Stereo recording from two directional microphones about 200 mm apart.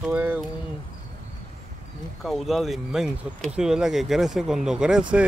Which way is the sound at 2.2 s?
Centre (ahead or behind).